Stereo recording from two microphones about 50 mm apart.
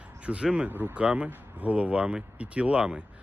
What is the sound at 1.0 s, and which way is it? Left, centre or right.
Speech, centre.